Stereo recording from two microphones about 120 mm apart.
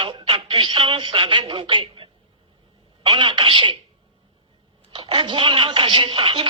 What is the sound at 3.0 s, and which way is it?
Speech, 45° right (ahead or behind).